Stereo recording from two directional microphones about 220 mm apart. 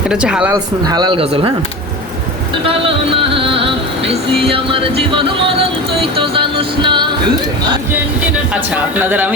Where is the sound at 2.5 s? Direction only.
25° right (ahead or behind).